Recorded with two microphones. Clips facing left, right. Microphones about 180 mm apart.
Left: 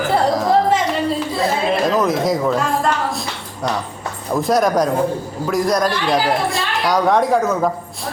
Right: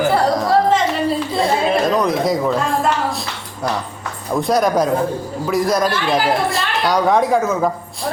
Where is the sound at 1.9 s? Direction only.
Centre (ahead or behind).